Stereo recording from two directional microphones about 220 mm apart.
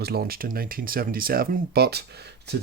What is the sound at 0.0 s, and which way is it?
Speech, 45° right (ahead or behind).